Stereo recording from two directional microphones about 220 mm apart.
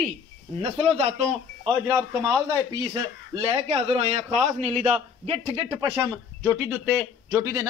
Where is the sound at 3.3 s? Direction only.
25° right (ahead or behind).